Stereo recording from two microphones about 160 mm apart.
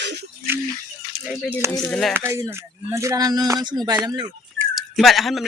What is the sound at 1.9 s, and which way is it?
Speech, 5° left (ahead or behind).